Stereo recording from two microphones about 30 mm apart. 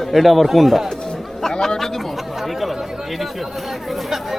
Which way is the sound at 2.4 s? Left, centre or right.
Centre.